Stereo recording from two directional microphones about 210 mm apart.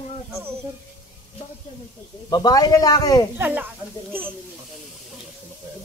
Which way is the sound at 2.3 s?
20° left (ahead or behind).